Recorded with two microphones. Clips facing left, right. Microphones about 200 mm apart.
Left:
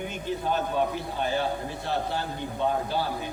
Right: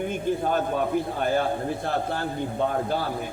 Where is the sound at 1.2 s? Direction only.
50° right (ahead or behind).